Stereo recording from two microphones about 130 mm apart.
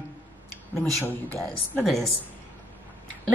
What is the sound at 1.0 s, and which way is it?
Speech, 15° left (ahead or behind).